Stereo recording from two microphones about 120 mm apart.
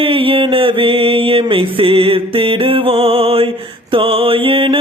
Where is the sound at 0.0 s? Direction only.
50° right (ahead or behind).